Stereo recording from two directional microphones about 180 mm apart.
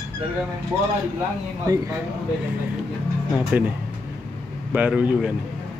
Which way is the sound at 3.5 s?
5° right (ahead or behind).